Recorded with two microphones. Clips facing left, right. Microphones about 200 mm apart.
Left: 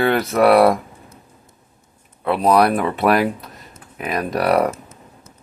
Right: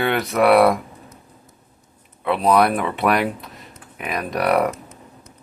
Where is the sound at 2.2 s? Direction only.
Centre (ahead or behind).